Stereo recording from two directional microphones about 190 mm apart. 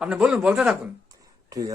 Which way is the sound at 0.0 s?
5° right (ahead or behind).